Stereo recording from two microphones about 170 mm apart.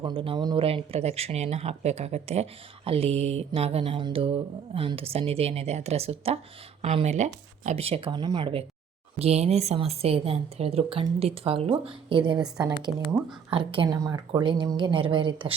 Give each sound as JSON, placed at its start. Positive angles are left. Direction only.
{"t": 0.0, "sound": "speech", "side_deg": -30}
{"t": 9.1, "sound": "speech", "side_deg": -35}